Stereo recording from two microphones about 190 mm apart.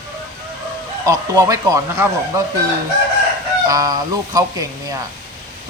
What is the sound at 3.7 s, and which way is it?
Speech, 20° right (ahead or behind).